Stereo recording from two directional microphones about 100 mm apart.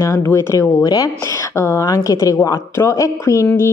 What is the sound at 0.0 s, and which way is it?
A woman's voice, 25° left (ahead or behind).